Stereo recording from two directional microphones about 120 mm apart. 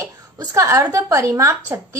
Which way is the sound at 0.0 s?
30° right (ahead or behind).